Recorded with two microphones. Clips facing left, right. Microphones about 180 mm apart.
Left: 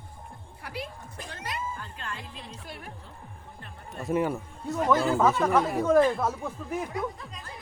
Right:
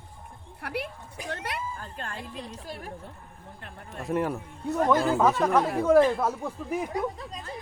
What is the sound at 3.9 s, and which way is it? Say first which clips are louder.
Speech: left 1 dB; centre (ahead or behind).